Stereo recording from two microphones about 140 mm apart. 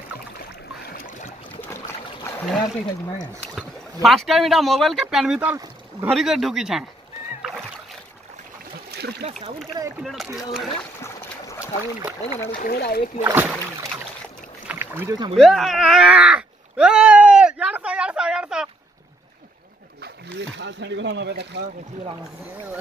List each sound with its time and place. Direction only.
0.4 s boat: 85° left
2.3 s a sound: 20° left (ahead or behind)
3.5 s speech: centre (ahead or behind)
6.1 s speech: centre (ahead or behind)
9.2 s speech: 55° right (ahead or behind)
10.0 s speech: centre (ahead or behind)
11.0 s boat: 20° left (ahead or behind)
12.4 s speech: 90° left
13.2 s speech: 15° right (ahead or behind)
14.7 s rowboat: 15° right (ahead or behind)
15.3 s a sound: centre (ahead or behind)